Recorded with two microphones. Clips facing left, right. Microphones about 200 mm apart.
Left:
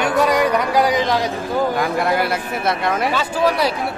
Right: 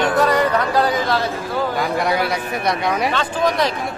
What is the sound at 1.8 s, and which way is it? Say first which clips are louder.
Speech: left 1 dB; centre (ahead or behind).